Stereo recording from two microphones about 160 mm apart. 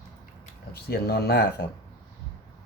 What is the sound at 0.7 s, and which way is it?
Speech, 80° left.